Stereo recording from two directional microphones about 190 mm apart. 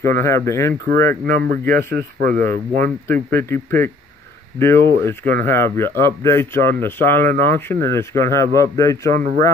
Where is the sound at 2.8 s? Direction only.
10° left (ahead or behind).